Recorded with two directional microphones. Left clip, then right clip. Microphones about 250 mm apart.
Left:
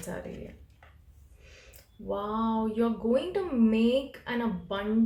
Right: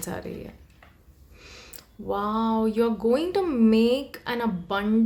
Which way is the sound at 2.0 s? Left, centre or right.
Right.